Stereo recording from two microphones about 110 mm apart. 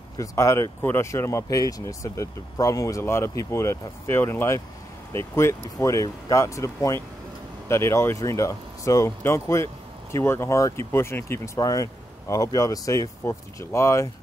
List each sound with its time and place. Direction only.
0.2 s speech: 25° left (ahead or behind)